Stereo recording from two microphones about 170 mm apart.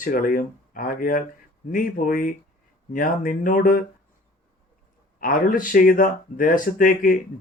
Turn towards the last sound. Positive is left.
turn(degrees=55)  # may be behind; listen again after turning